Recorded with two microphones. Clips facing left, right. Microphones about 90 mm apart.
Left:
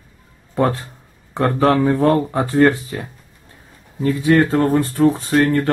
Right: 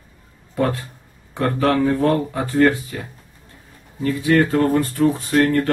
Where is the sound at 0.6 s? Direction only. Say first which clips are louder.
Left 3 dB; 30° left (ahead or behind).